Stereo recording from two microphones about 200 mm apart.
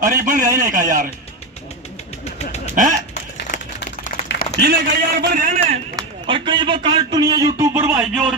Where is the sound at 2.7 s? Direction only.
40° right (ahead or behind).